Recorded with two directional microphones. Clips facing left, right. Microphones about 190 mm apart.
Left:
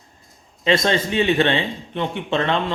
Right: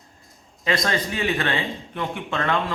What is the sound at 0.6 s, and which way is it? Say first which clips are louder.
A man's voice: left 5 dB; 25° left (ahead or behind).